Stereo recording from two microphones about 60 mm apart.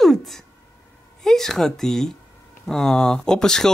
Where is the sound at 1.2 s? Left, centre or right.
Centre.